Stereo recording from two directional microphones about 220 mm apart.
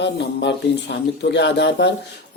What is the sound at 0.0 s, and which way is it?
Speech, 50° left (ahead or behind).